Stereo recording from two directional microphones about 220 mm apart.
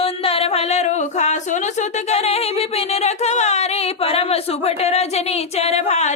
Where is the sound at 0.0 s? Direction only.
25° left (ahead or behind).